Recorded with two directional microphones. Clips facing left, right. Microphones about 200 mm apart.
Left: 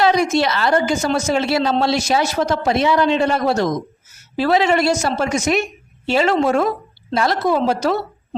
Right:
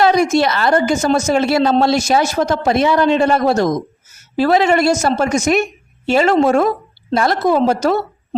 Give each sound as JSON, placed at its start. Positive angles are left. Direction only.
{"t": 0.0, "sound": "a woman's voice", "side_deg": -45}